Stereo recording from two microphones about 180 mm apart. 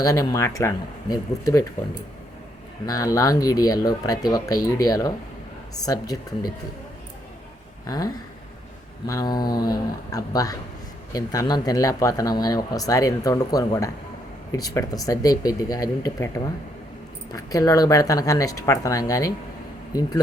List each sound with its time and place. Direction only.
0.0 s speech: 20° left (ahead or behind)
2.8 s speech: 20° left (ahead or behind)
7.9 s speech: 20° left (ahead or behind)